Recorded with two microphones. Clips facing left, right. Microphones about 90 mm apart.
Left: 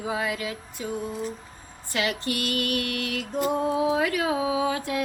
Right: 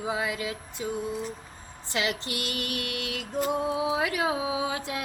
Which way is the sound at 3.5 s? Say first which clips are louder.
Left 3 dB; 35° left (ahead or behind).